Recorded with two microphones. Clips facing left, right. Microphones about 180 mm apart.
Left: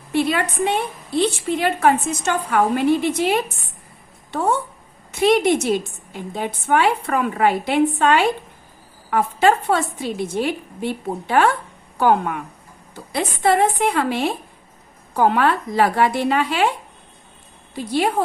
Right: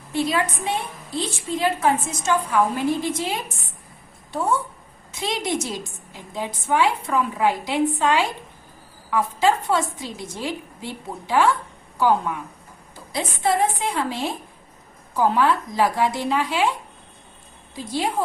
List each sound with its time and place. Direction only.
0.1 s a woman's voice: 65° left (ahead or behind)
17.7 s a woman's voice: 65° left (ahead or behind)